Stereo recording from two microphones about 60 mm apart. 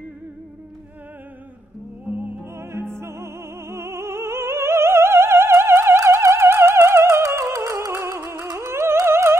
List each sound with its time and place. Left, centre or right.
2.0 s music: right
2.5 s music: right
8.0 s flamenco: right
9.0 s music: right